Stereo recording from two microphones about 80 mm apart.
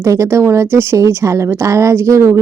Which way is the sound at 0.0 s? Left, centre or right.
Right.